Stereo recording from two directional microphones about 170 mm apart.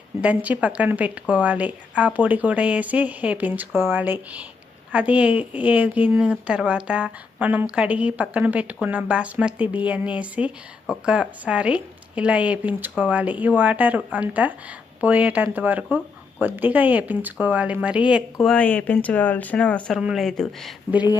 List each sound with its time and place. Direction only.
0.2 s a woman's voice: 10° right (ahead or behind)
18.4 s speech: 5° left (ahead or behind)